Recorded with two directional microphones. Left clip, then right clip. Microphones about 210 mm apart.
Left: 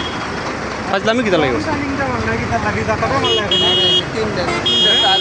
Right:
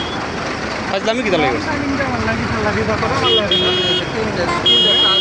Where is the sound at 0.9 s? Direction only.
25° left (ahead or behind).